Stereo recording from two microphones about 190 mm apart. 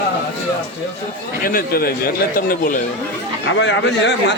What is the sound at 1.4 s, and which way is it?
Speech, 50° left (ahead or behind).